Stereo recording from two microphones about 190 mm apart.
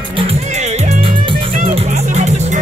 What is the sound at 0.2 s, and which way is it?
Music, 35° right (ahead or behind).